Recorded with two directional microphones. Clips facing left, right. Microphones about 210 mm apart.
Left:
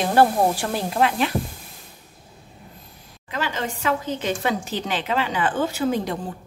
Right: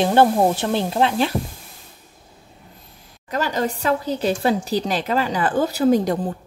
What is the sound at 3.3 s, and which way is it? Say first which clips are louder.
A woman's voice: right 5 dB; 40° right (ahead or behind).